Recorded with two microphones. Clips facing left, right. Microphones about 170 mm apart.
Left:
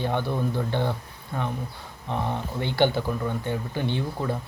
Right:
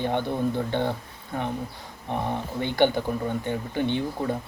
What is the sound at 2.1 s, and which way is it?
Speech, 15° right (ahead or behind).